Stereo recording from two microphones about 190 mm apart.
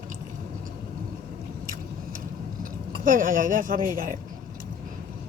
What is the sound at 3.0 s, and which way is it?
Speech, 45° right (ahead or behind).